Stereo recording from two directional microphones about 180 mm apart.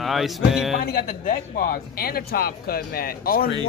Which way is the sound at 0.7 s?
60° left (ahead or behind).